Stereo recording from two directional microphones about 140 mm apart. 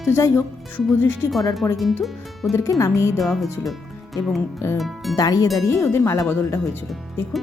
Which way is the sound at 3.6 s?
Centre (ahead or behind).